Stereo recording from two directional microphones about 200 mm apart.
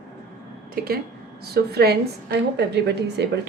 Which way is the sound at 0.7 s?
50° right (ahead or behind).